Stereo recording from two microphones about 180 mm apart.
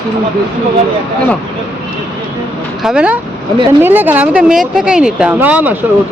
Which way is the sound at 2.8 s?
5° right (ahead or behind).